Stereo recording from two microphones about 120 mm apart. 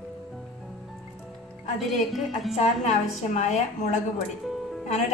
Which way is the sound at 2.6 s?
70° left (ahead or behind).